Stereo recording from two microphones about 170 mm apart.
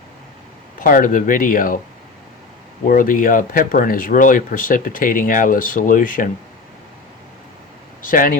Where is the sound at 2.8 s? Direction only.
55° left (ahead or behind).